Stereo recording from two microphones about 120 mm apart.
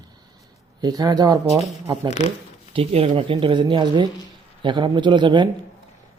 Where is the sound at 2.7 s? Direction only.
55° right (ahead or behind).